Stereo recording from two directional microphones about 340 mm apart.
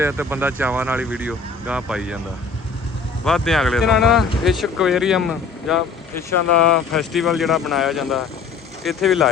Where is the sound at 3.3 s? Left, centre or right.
Centre.